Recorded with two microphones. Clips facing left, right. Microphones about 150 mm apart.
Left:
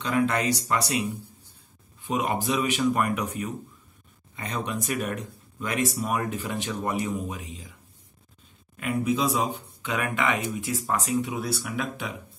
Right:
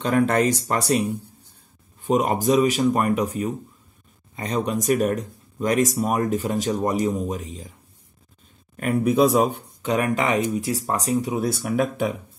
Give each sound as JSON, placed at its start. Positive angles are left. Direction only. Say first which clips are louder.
{"t": 0.0, "sound": "speech", "louder": "right 5 dB", "side_deg": -45}
{"t": 8.7, "sound": "speech", "louder": "right 6 dB", "side_deg": -50}
{"t": 9.8, "sound": "speech", "louder": "right 5 dB", "side_deg": -40}